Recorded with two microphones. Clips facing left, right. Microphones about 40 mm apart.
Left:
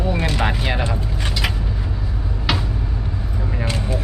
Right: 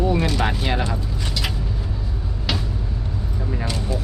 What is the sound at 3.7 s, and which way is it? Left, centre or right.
Speech, left.